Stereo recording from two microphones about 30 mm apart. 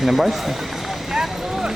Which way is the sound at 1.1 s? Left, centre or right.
Centre.